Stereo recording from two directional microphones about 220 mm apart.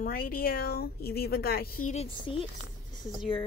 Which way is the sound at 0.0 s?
40° left (ahead or behind).